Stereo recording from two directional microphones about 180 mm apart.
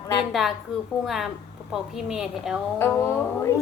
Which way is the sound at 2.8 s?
15° left (ahead or behind).